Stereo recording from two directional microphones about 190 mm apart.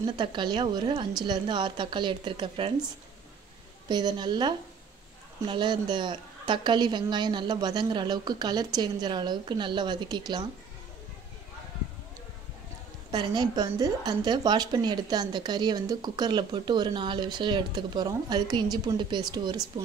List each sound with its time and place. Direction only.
0.0 s a woman's voice: 25° right (ahead or behind)
3.9 s a woman's voice: 20° right (ahead or behind)
13.1 s a woman's voice: 25° right (ahead or behind)